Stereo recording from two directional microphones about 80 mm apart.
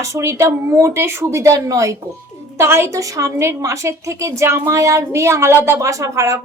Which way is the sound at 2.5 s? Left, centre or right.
Right.